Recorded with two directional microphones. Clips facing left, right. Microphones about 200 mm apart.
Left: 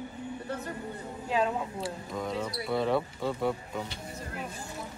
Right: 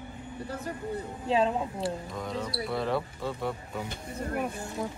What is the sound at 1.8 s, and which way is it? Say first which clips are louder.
Speech: right 1 dB; centre (ahead or behind).